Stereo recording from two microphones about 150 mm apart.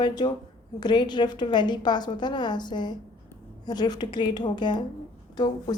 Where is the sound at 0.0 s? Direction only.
30° left (ahead or behind).